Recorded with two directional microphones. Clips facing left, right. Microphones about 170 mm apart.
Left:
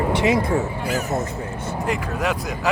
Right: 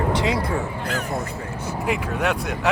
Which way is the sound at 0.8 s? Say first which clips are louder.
Left 3 dB; 5° left (ahead or behind).